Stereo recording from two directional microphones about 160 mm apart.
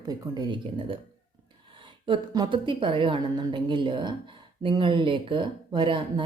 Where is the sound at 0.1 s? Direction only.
25° right (ahead or behind).